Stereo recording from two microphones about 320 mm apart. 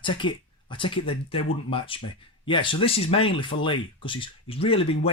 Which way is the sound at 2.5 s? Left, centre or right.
Centre.